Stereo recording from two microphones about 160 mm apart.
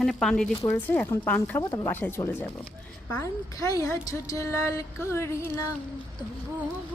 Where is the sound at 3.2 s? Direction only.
20° left (ahead or behind).